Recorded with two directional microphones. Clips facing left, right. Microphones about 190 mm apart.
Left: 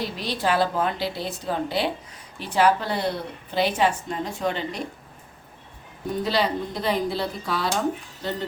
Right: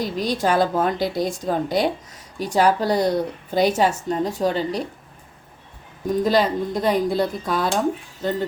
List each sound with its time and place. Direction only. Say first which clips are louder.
0.0 s a woman's voice: right 4 dB; 45° right (ahead or behind)
6.2 s a woman's voice: right 4 dB; 45° right (ahead or behind)